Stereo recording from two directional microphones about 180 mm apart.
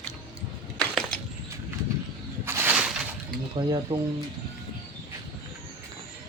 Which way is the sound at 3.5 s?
25° right (ahead or behind).